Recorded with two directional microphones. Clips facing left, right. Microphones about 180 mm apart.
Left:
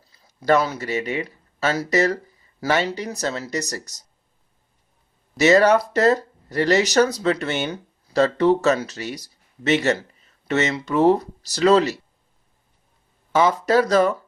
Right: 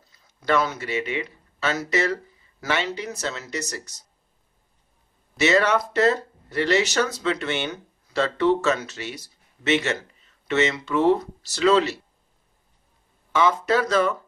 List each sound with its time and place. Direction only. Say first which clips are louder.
0.0 s speech: left 5 dB; 35° left (ahead or behind)
5.4 s speech: left 5 dB; 40° left (ahead or behind)
13.3 s speech: left 3 dB; 40° left (ahead or behind)